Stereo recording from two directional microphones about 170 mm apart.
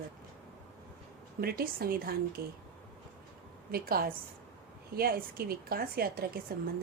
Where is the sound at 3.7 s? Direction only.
60° right (ahead or behind).